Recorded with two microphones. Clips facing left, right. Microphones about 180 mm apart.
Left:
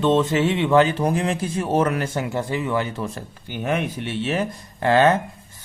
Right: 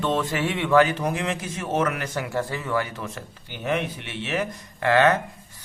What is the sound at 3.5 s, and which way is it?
Speech, 50° left (ahead or behind).